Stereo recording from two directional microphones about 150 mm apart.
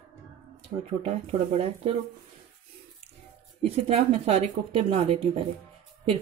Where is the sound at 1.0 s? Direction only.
40° right (ahead or behind).